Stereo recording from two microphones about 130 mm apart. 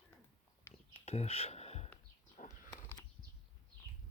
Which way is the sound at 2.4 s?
80° left.